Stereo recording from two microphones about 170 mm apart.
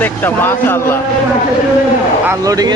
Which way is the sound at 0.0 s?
10° left (ahead or behind).